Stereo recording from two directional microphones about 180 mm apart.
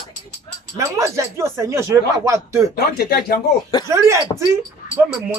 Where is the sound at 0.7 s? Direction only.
15° right (ahead or behind).